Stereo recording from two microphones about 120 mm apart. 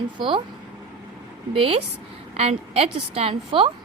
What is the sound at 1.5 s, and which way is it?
A woman's voice, 50° right (ahead or behind).